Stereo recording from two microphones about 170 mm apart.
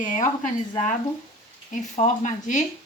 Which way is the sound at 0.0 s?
50° left (ahead or behind).